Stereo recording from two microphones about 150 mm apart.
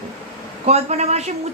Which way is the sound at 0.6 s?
45° right (ahead or behind).